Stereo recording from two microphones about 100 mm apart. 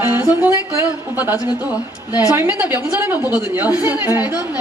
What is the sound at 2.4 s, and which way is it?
Speech, 20° right (ahead or behind).